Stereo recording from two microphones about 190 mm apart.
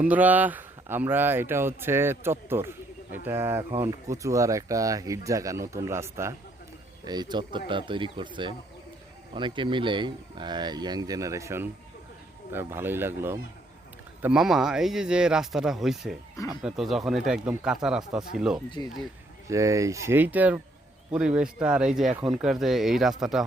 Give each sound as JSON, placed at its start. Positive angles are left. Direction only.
{"t": 0.0, "sound": "speech", "side_deg": -10}
{"t": 19.5, "sound": "speech", "side_deg": -15}